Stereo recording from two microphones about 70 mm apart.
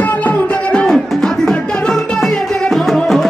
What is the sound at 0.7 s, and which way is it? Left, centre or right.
Music, centre.